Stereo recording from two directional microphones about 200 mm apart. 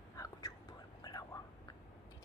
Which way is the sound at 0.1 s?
15° left (ahead or behind).